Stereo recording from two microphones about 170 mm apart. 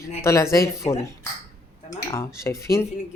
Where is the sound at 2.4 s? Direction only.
15° left (ahead or behind).